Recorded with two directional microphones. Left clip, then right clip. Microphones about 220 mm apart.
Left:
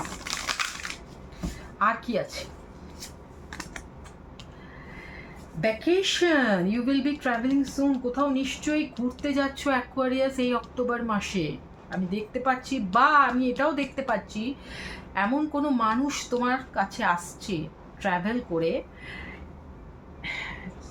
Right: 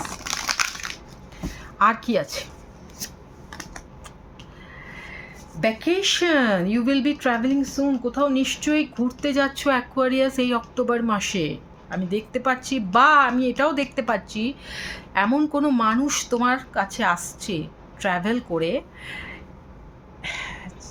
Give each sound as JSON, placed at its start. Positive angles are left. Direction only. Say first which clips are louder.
{"t": 0.3, "sound": "crushing", "louder": "right 5 dB", "side_deg": -20}
{"t": 1.8, "sound": "a woman's voice", "louder": "right 6 dB", "side_deg": -55}
{"t": 5.5, "sound": "speech", "louder": "right 2 dB", "side_deg": -50}